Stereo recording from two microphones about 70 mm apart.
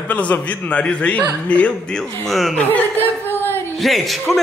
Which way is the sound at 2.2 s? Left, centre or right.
Centre.